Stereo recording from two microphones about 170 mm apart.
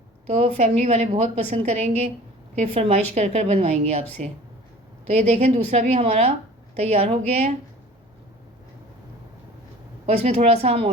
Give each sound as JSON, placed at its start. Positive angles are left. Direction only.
{"t": 0.3, "sound": "a woman's voice", "side_deg": -35}
{"t": 10.1, "sound": "a woman's voice", "side_deg": -35}